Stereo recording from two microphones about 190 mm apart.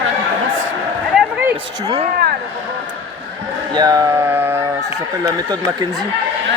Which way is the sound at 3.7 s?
20° right (ahead or behind).